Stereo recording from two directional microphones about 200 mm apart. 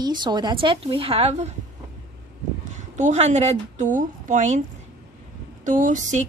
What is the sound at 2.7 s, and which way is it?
A woman's voice, 35° right (ahead or behind).